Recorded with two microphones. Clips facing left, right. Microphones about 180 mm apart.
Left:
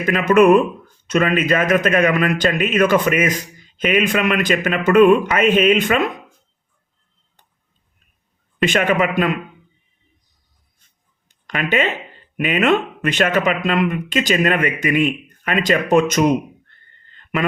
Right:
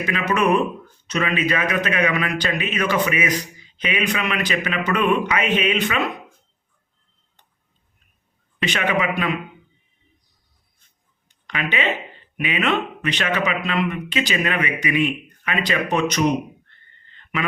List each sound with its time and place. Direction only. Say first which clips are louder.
0.0 s a man's voice: left 8 dB; 50° left (ahead or behind)
8.6 s a man's voice: left 5 dB; 45° left (ahead or behind)
11.4 s a man's voice: left 4 dB; 45° left (ahead or behind)
17.1 s a sound: left 5 dB; 45° left (ahead or behind)